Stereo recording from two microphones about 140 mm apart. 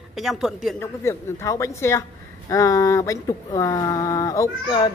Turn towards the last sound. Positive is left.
turn(degrees=35)  # may be behind; listen again after turning